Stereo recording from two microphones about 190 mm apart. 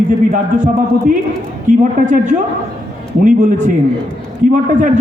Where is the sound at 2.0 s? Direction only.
40° right (ahead or behind).